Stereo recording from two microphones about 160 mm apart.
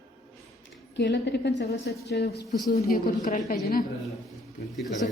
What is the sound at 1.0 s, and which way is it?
A woman's voice, 90° left.